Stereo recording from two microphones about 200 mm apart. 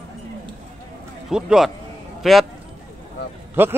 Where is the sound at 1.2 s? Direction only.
5° right (ahead or behind).